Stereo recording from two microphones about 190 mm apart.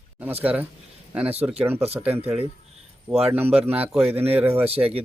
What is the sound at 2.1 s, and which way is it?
Speech, 10° right (ahead or behind).